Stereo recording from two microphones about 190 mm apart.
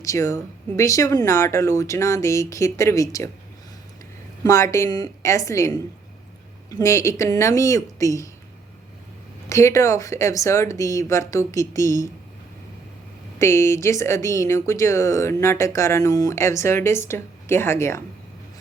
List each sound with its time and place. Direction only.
0.0 s a woman's voice: 15° left (ahead or behind)
4.4 s a woman's voice: 15° left (ahead or behind)
9.5 s a woman's voice: 15° left (ahead or behind)
13.4 s a woman's voice: 15° left (ahead or behind)